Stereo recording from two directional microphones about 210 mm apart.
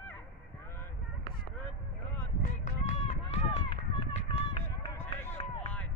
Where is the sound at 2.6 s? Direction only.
35° left (ahead or behind).